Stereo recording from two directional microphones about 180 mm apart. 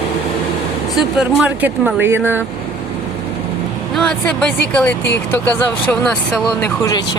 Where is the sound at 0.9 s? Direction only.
5° right (ahead or behind).